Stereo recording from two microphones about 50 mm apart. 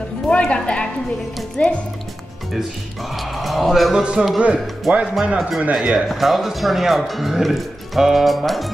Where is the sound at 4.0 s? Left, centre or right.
Centre.